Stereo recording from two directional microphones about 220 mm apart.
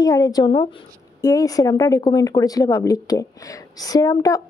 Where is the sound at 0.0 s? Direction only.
15° left (ahead or behind).